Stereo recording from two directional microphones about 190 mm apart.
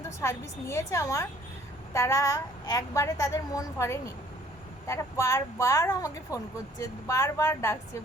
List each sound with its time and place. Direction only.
0.2 s speech: 15° left (ahead or behind)